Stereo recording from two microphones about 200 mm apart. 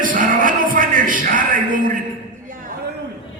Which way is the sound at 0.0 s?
40° right (ahead or behind).